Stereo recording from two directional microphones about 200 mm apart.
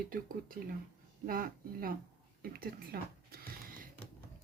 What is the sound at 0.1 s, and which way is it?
Speech, 45° right (ahead or behind).